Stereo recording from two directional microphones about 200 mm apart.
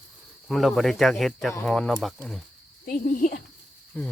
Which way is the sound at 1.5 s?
10° left (ahead or behind).